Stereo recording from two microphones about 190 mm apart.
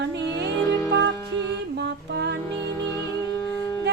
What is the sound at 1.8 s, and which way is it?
Music, 60° right (ahead or behind).